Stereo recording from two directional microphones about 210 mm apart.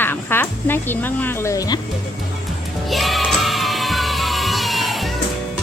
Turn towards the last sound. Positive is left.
turn(degrees=0)  # may be behind; listen again after turning